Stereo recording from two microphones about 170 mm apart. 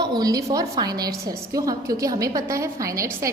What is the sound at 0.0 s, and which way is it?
A woman's voice, 25° right (ahead or behind).